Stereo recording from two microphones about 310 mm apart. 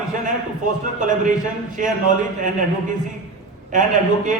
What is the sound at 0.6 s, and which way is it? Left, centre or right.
A man's voice, right.